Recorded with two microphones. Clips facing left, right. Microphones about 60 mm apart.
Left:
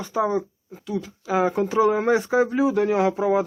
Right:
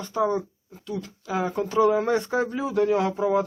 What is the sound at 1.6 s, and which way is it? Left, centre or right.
Speech, centre.